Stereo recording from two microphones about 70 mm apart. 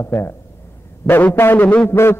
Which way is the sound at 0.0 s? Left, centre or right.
Left.